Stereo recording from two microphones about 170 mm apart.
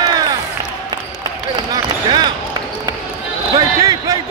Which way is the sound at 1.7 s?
25° right (ahead or behind).